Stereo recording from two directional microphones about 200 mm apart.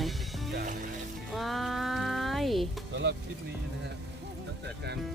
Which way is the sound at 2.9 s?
60° right (ahead or behind).